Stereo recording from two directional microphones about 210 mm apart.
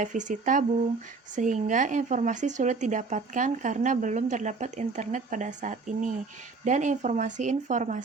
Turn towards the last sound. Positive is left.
turn(degrees=-35)  # may be behind; listen again after turning